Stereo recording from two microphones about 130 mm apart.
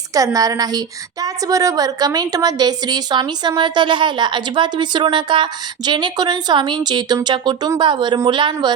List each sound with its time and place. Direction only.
0.1 s a woman's voice: 25° right (ahead or behind)